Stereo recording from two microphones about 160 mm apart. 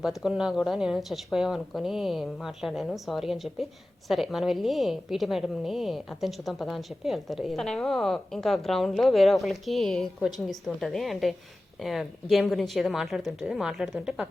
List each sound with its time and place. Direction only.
0.0 s a woman's voice: centre (ahead or behind)